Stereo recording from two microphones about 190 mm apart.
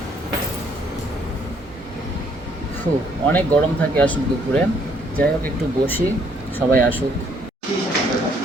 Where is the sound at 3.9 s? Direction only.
5° left (ahead or behind).